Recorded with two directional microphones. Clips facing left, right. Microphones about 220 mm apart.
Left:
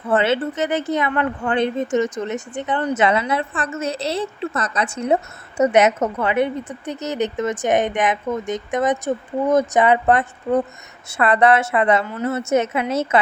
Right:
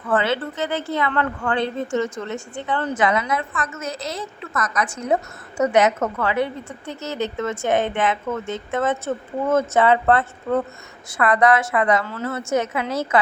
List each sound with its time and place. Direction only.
0.0 s a woman's voice: 25° left (ahead or behind)
11.2 s speech: 25° left (ahead or behind)